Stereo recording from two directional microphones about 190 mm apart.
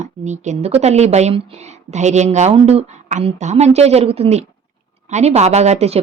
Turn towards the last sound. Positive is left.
turn(degrees=-35)  # may be behind; listen again after turning